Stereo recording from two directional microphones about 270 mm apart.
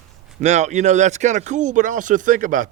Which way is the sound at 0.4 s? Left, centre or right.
Right.